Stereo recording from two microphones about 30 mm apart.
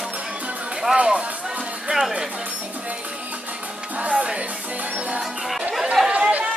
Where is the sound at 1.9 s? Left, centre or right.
Right.